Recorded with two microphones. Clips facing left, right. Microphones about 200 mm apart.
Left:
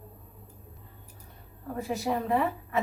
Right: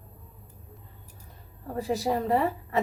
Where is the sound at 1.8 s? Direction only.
35° right (ahead or behind).